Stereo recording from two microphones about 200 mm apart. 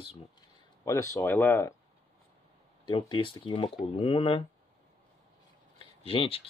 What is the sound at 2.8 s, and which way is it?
Speech, 25° left (ahead or behind).